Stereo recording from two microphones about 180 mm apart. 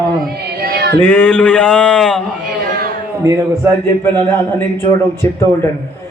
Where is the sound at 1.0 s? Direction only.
10° left (ahead or behind).